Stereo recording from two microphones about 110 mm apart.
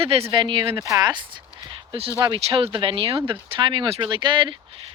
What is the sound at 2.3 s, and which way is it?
Speech, 55° right (ahead or behind).